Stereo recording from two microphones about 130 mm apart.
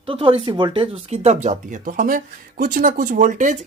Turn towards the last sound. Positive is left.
turn(degrees=-70)  # may be behind; listen again after turning